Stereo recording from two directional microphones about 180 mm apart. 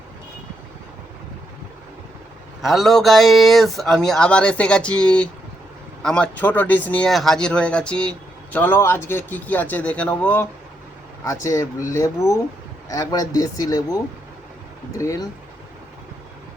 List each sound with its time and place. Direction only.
2.6 s speech: centre (ahead or behind); by 13.8 s 20° left (ahead or behind)
14.9 s speech: 20° left (ahead or behind)